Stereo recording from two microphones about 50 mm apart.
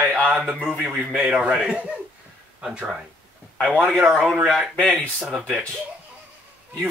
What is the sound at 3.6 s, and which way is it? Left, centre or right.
Speech, centre.